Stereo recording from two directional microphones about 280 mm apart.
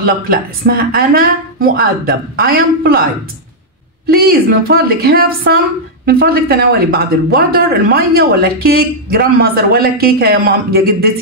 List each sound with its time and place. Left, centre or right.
0.0 s speech: right
4.1 s speech: right